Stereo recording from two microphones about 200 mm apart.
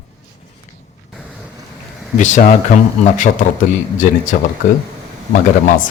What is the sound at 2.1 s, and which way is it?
A man's voice, 40° left (ahead or behind).